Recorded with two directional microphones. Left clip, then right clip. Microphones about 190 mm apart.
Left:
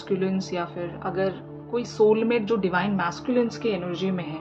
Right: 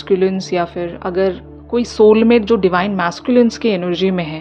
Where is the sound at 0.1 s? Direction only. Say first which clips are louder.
Right 12 dB; 45° right (ahead or behind).